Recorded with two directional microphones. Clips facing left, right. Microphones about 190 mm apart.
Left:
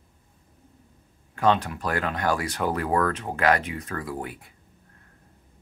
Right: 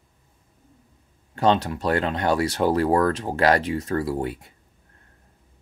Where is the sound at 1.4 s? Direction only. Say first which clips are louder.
Right 2 dB; 30° right (ahead or behind).